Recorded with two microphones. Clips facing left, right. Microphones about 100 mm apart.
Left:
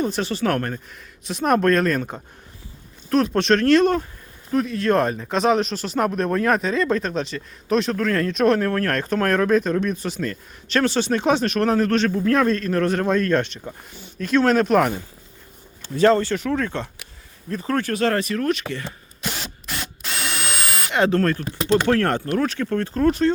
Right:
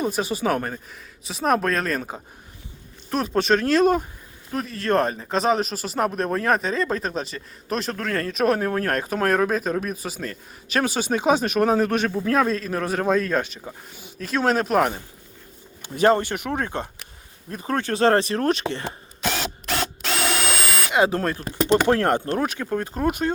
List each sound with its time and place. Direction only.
0.0 s speech: 10° right (ahead or behind)
15.8 s speech: 15° right (ahead or behind)
16.5 s speech: 25° right (ahead or behind)
19.3 s drill: 90° right
20.9 s speech: 10° right (ahead or behind)